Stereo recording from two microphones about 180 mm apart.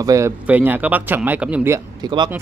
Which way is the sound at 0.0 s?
20° right (ahead or behind).